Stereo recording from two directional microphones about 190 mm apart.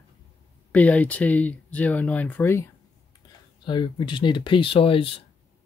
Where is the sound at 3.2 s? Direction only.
20° left (ahead or behind).